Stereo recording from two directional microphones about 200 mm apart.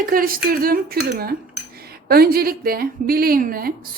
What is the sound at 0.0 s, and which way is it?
A woman's voice, 45° right (ahead or behind).